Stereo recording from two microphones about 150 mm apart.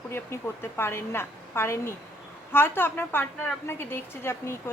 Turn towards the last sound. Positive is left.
turn(degrees=15)  # may be behind; listen again after turning